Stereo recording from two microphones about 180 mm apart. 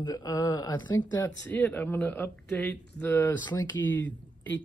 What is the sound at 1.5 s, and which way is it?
Speech, 10° left (ahead or behind).